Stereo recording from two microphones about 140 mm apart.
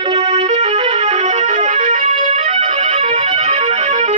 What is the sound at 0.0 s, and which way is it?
Music, 45° right (ahead or behind).